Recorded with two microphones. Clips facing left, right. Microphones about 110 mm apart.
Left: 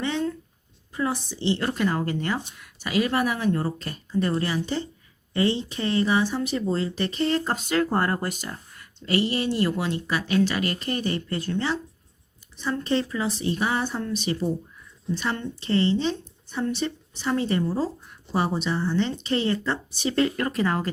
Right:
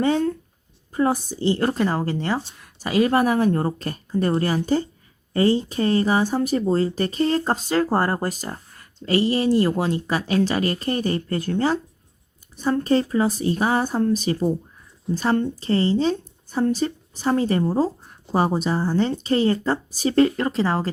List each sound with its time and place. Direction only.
0.0 s speech: 45° right (ahead or behind)
20.3 s speech: 25° right (ahead or behind)